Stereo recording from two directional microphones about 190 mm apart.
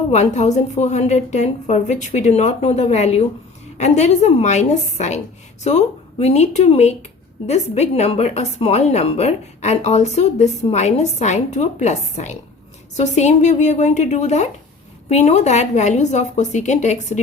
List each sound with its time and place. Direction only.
0.1 s a woman's voice: 35° left (ahead or behind)